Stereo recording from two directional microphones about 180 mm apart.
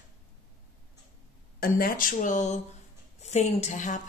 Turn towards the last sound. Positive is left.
turn(degrees=45)  # may be behind; listen again after turning